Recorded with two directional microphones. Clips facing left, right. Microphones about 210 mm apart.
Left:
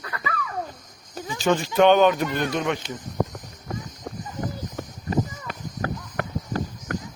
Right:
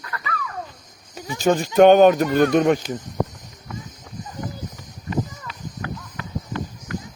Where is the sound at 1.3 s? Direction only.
45° right (ahead or behind).